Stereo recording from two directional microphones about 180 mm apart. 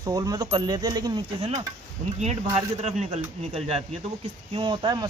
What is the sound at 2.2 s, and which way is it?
Speech, 40° right (ahead or behind).